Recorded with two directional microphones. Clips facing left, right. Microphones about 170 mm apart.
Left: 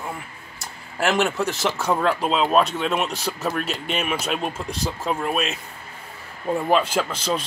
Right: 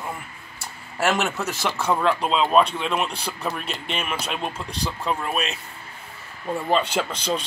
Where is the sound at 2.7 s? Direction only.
40° left (ahead or behind).